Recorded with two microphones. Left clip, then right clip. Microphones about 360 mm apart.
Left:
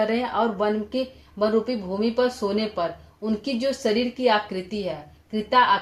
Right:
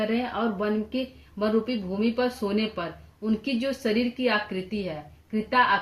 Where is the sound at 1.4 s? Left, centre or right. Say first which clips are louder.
Left 4 dB; centre.